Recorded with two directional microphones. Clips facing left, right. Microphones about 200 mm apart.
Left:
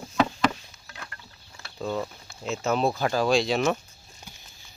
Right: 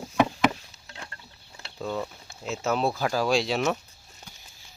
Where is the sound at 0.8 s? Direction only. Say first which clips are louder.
Left 1 dB; 25° right (ahead or behind).